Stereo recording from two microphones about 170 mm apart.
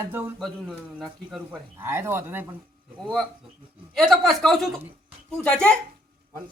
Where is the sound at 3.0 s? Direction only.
5° left (ahead or behind).